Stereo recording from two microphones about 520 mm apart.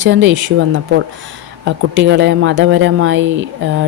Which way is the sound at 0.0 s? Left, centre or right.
Right.